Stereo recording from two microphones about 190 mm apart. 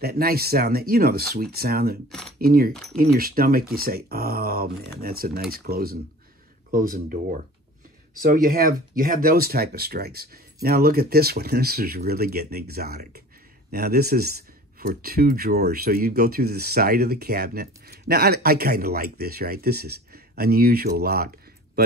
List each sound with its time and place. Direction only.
0.0 s speech: 55° right (ahead or behind)
2.7 s speech: centre (ahead or behind)
3.0 s speech: 50° right (ahead or behind)